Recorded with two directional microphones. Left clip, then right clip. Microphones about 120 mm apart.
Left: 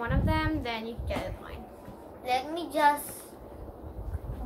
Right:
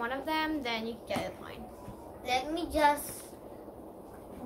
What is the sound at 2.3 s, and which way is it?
Speech, 25° left (ahead or behind).